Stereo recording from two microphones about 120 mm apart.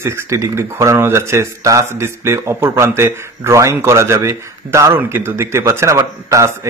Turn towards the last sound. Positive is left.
turn(degrees=-25)  # may be behind; listen again after turning